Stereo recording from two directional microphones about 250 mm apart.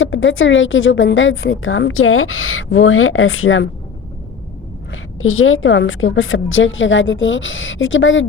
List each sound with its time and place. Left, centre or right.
0.0 s a woman's voice: left
5.2 s a woman's voice: left